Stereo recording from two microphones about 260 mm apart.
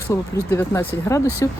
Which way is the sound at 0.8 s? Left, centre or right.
Left.